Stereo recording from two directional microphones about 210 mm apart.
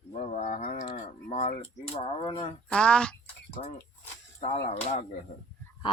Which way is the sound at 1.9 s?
25° left (ahead or behind).